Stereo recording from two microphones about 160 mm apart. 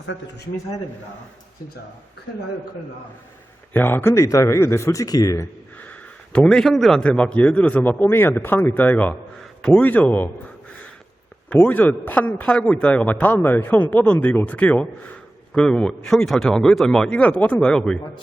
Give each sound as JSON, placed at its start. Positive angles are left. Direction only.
{"t": 3.7, "sound": "speech", "side_deg": 15}
{"t": 5.8, "sound": "a man's voice", "side_deg": 10}
{"t": 11.4, "sound": "a man's voice", "side_deg": 10}